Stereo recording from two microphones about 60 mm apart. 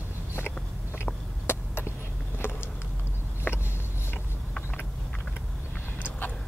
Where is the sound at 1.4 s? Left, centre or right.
Left.